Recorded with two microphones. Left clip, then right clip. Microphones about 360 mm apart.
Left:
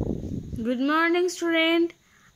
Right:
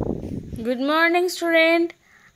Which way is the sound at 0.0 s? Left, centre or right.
Right.